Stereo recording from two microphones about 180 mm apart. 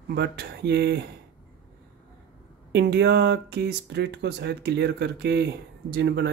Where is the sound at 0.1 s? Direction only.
65° right (ahead or behind).